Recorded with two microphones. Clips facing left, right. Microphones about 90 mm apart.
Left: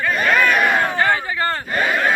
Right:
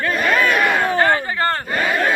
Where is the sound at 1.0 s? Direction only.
45° right (ahead or behind).